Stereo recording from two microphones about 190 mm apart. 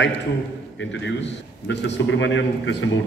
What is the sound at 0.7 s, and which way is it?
A man's voice, 70° left (ahead or behind).